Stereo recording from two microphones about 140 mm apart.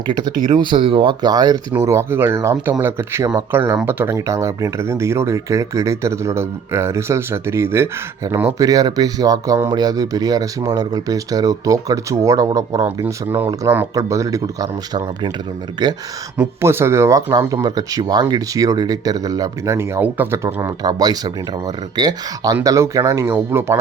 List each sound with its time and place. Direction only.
0.1 s speech: 30° right (ahead or behind)
16.4 s speech: 15° right (ahead or behind)